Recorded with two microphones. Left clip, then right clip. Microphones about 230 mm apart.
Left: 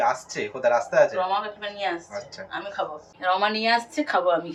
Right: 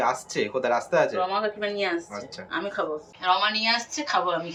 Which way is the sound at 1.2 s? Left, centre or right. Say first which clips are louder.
Even; centre.